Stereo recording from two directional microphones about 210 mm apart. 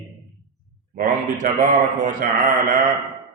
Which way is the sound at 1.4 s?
40° right (ahead or behind).